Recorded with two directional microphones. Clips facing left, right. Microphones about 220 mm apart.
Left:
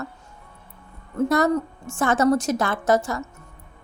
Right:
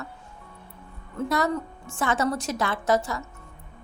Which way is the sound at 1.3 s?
45° left (ahead or behind).